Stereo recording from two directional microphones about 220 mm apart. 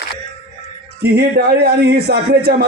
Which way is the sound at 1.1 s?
45° right (ahead or behind).